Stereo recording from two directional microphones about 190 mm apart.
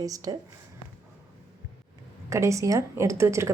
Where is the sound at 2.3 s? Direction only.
15° right (ahead or behind).